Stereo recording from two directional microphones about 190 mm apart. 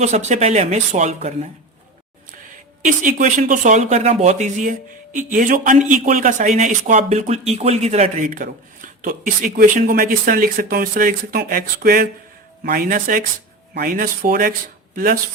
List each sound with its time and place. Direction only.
0.0 s speech: 40° right (ahead or behind)
2.8 s speech: 45° right (ahead or behind)